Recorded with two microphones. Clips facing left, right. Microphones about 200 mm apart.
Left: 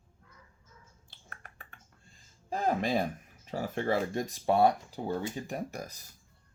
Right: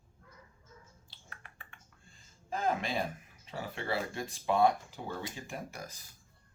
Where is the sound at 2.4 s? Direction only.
35° left (ahead or behind).